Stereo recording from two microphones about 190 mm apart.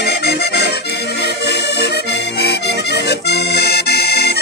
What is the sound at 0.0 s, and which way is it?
Accordion, 60° left (ahead or behind).